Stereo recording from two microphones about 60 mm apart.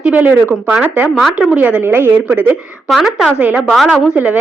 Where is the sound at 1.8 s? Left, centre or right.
Right.